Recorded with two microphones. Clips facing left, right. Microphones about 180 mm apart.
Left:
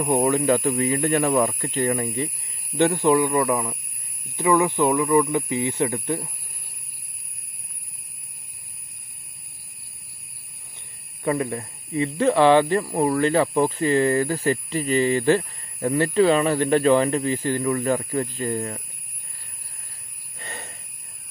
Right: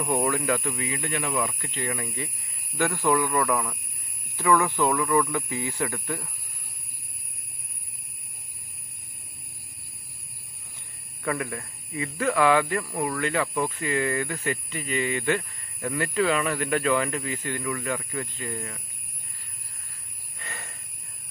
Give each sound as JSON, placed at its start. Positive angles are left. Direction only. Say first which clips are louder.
{"t": 0.0, "sound": "speech", "louder": "left 6 dB", "side_deg": 25}
{"t": 11.2, "sound": "speech", "louder": "left 6 dB", "side_deg": 30}
{"t": 20.3, "sound": "a sound", "louder": "left 4 dB", "side_deg": 30}